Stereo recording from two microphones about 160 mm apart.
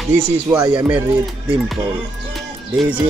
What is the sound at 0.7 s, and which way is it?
Speech, 10° right (ahead or behind).